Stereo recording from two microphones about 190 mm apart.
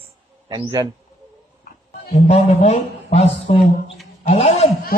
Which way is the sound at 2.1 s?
35° left (ahead or behind).